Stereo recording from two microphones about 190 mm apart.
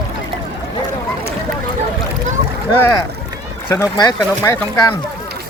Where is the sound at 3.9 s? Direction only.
20° left (ahead or behind).